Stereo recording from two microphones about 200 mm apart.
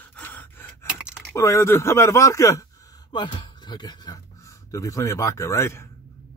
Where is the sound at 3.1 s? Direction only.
20° left (ahead or behind).